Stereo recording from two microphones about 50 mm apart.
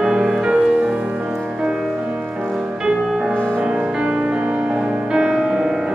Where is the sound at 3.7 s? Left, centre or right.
Centre.